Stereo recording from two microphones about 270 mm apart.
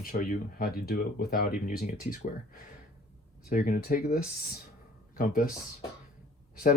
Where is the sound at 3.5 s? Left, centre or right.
Left.